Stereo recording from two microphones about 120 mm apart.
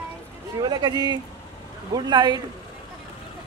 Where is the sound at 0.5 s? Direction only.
35° right (ahead or behind).